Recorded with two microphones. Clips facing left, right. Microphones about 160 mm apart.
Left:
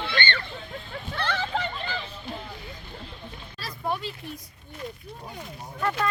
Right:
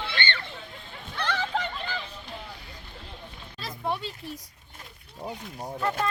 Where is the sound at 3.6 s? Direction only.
25° right (ahead or behind).